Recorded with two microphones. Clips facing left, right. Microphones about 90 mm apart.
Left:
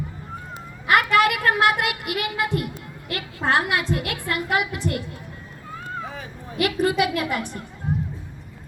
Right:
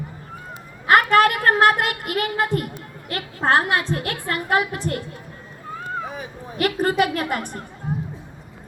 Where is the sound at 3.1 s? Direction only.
40° right (ahead or behind).